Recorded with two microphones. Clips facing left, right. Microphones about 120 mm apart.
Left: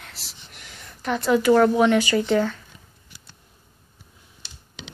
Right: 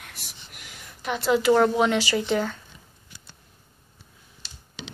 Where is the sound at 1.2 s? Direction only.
15° right (ahead or behind).